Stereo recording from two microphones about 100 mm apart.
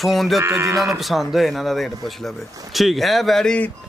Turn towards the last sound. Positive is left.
turn(degrees=10)  # may be behind; listen again after turning